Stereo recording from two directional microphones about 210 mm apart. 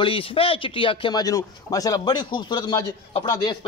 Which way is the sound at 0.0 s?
25° left (ahead or behind).